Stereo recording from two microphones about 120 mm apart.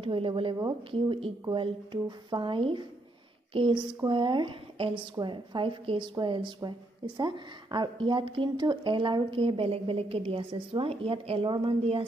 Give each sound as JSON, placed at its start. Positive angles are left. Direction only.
{"t": 0.0, "sound": "a woman's voice", "side_deg": -50}